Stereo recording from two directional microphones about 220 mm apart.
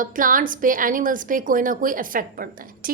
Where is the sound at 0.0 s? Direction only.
40° right (ahead or behind).